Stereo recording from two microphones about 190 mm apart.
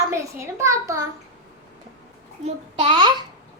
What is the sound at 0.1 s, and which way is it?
Speech, 15° right (ahead or behind).